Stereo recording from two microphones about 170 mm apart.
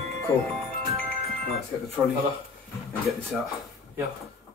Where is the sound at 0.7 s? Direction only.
35° right (ahead or behind).